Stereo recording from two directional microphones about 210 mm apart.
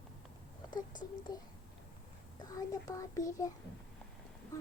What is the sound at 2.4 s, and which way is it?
A child's voice, 15° left (ahead or behind).